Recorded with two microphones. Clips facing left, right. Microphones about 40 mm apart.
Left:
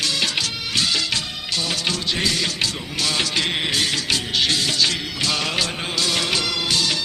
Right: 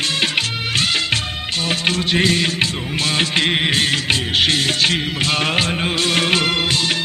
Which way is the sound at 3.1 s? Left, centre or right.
Right.